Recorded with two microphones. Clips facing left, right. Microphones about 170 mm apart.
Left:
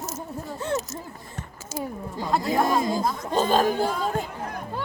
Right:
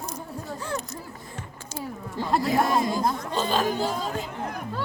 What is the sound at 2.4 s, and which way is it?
Speech, 25° left (ahead or behind).